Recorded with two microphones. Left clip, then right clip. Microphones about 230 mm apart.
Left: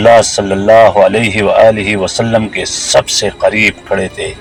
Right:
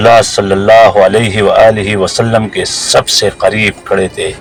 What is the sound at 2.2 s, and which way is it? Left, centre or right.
Speech, right.